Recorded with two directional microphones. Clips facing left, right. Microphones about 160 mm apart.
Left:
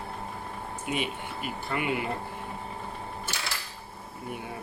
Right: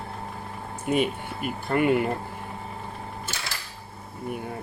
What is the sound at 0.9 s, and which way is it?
Speech, 45° right (ahead or behind).